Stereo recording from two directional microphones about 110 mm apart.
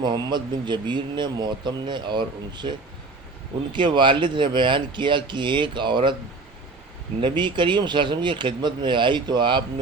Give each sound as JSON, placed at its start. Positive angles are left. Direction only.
{"t": 0.0, "sound": "speech", "side_deg": -40}
{"t": 3.8, "sound": "speech", "side_deg": -45}
{"t": 7.2, "sound": "speech", "side_deg": -45}